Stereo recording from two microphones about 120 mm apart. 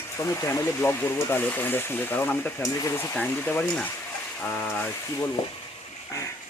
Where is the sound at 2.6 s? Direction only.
30° left (ahead or behind).